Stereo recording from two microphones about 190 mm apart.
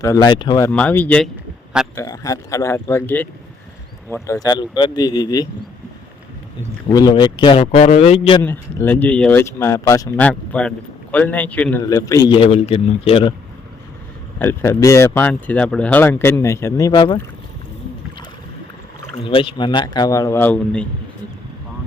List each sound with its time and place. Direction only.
0.0 s a man's voice: 20° left (ahead or behind)
0.7 s a man's voice: 5° left (ahead or behind)
6.8 s a man's voice: 20° left (ahead or behind)
8.4 s speech: 10° left (ahead or behind); by 13.3 s 30° left (ahead or behind)
14.3 s speech: 15° left (ahead or behind)
19.2 s a man's voice: 30° left (ahead or behind); by 20.8 s 10° left (ahead or behind)